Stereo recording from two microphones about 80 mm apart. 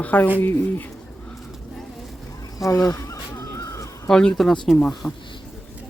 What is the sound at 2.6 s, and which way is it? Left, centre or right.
Speech, left.